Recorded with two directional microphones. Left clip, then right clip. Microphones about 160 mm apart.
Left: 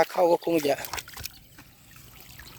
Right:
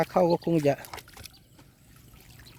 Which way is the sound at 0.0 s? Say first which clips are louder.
Left 2 dB; 20° left (ahead or behind).